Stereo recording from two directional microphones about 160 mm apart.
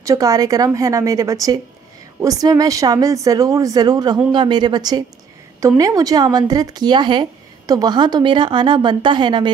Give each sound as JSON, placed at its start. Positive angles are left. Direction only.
{"t": 0.0, "sound": "speech", "side_deg": -20}